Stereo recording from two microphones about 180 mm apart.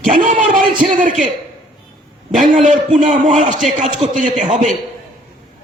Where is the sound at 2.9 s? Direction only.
45° right (ahead or behind).